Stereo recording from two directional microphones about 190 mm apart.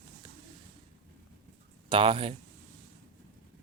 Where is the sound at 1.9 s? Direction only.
30° right (ahead or behind).